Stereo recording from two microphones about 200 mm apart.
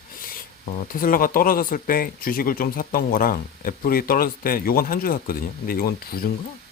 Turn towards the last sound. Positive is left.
turn(degrees=50)  # may be behind; listen again after turning